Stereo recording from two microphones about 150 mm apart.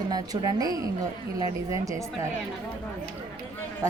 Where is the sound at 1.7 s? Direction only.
20° right (ahead or behind).